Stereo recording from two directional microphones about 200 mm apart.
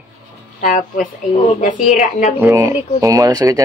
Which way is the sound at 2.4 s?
15° right (ahead or behind).